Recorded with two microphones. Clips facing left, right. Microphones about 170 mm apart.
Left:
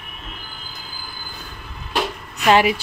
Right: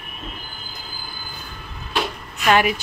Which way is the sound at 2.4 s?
25° left (ahead or behind).